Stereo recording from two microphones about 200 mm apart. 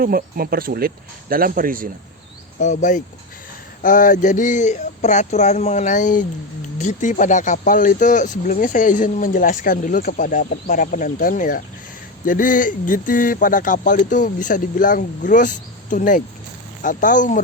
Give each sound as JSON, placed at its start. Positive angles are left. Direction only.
{"t": 0.0, "sound": "speech", "side_deg": -45}
{"t": 2.6, "sound": "speech", "side_deg": 35}